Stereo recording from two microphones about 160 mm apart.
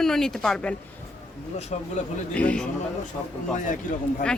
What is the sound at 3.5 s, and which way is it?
Speech, 55° left (ahead or behind).